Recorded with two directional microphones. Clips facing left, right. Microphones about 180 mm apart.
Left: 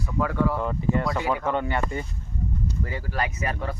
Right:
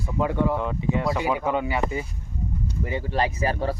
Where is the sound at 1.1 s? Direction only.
15° right (ahead or behind).